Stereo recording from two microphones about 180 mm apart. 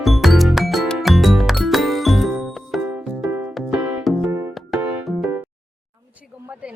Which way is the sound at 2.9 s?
10° right (ahead or behind).